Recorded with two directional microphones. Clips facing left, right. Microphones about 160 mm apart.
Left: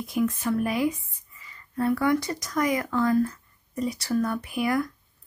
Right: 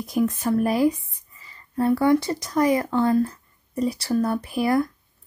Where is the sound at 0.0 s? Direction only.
40° right (ahead or behind).